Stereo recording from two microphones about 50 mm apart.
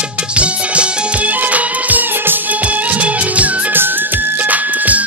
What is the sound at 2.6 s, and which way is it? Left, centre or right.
Music, right.